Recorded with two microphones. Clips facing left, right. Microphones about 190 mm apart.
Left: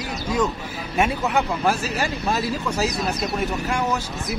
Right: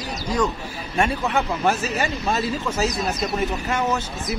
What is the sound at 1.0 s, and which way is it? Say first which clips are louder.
Speech: left 1 dB; centre (ahead or behind).